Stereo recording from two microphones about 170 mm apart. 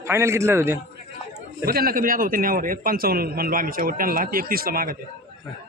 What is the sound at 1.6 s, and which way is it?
A man's voice, 60° right (ahead or behind).